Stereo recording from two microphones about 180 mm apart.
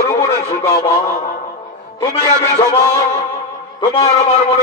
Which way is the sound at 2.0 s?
30° left (ahead or behind).